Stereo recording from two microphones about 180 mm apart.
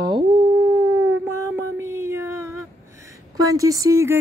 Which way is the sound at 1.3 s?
15° right (ahead or behind).